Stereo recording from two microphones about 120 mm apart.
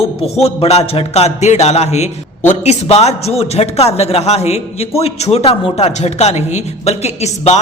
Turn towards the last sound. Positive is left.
turn(degrees=65)  # may be behind; listen again after turning